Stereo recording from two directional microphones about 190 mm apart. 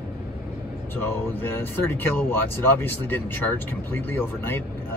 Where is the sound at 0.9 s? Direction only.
10° left (ahead or behind).